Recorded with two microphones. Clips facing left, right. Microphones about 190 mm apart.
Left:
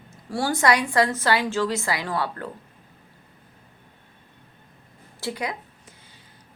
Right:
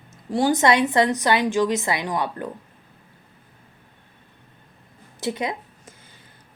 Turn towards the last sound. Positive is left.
turn(degrees=-20)  # may be behind; listen again after turning